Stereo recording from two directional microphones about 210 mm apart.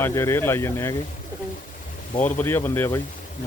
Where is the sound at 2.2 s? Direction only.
10° left (ahead or behind).